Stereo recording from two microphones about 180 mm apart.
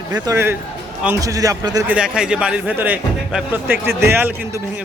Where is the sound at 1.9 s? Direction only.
5° right (ahead or behind).